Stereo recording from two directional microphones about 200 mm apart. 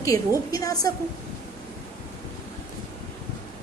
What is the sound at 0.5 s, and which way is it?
Speech, 20° left (ahead or behind).